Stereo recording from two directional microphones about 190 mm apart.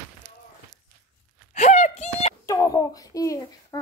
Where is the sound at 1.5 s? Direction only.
35° left (ahead or behind).